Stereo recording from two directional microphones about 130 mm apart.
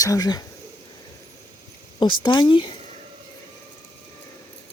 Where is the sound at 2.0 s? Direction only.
40° left (ahead or behind).